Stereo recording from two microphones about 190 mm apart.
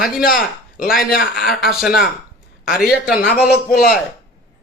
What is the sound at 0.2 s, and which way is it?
A man's voice, 50° left (ahead or behind).